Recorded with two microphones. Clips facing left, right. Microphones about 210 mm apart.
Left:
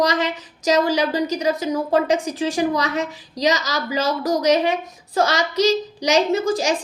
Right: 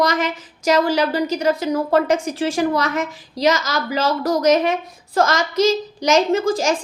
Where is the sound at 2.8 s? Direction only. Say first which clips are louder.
Right 1 dB; 35° left (ahead or behind).